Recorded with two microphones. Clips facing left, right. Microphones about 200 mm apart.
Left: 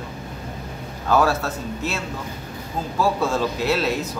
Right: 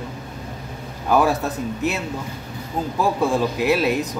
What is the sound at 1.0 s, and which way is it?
Speech, 15° right (ahead or behind).